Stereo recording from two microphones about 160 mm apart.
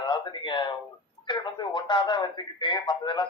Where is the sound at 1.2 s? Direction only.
30° left (ahead or behind).